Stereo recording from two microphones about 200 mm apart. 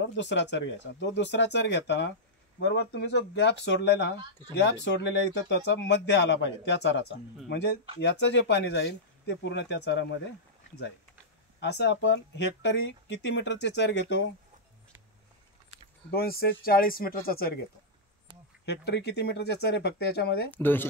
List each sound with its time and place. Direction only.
0.0 s speech: 60° left (ahead or behind)
11.6 s speech: 60° left (ahead or behind)
16.1 s speech: 50° left (ahead or behind)
18.7 s speech: 55° left (ahead or behind)
20.5 s speech: 10° left (ahead or behind)